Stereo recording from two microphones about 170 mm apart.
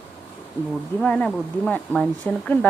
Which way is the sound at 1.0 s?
5° left (ahead or behind).